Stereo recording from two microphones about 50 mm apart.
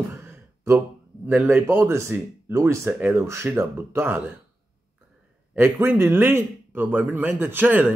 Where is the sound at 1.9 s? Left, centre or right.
Right.